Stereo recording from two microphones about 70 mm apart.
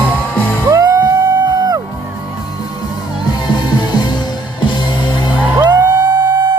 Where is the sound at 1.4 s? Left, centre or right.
Right.